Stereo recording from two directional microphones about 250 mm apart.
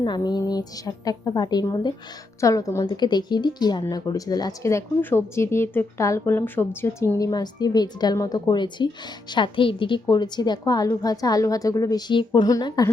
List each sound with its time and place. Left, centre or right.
0.0 s speech: centre